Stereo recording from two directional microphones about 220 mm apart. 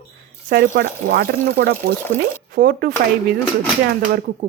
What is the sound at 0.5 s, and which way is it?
Speech, 40° right (ahead or behind).